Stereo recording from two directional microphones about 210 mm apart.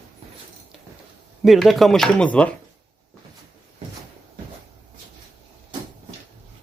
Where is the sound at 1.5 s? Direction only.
Centre (ahead or behind).